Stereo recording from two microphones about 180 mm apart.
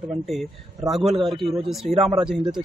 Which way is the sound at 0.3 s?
Centre (ahead or behind).